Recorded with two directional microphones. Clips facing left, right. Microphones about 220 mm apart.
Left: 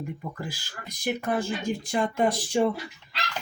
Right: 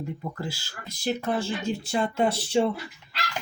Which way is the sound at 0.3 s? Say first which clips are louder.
Right 2 dB; 15° left (ahead or behind).